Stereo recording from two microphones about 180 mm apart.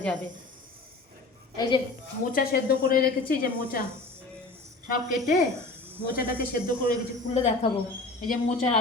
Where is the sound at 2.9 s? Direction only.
55° left (ahead or behind).